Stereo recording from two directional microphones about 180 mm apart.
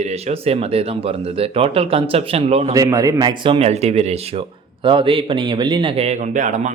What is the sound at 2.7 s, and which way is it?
A man's voice, 20° right (ahead or behind).